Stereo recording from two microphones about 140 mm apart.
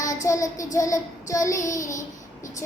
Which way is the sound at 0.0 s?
65° left (ahead or behind).